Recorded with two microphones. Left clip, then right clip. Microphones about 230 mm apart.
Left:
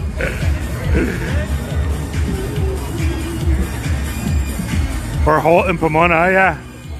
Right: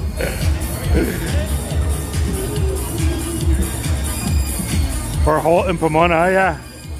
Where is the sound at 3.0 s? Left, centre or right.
Right.